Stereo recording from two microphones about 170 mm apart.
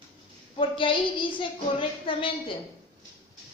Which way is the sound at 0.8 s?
30° left (ahead or behind).